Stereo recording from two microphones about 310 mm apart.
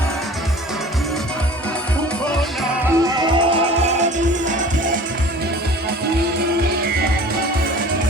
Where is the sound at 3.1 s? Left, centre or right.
Centre.